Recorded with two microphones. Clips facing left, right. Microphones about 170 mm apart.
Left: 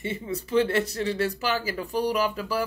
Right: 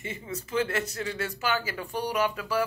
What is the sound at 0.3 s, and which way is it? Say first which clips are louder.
A woman's voice: left 5 dB; 35° left (ahead or behind).